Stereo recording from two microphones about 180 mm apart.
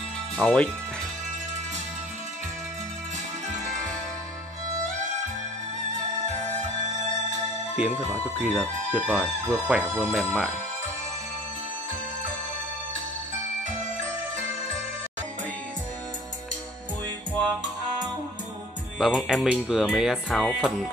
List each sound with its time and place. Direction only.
0.4 s speech: 10° left (ahead or behind)
7.7 s speech: 10° right (ahead or behind)
18.9 s speech: 5° right (ahead or behind)